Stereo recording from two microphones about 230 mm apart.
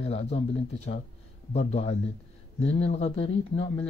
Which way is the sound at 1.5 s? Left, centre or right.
Left.